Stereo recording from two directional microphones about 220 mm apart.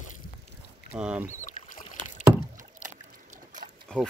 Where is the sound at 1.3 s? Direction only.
35° left (ahead or behind).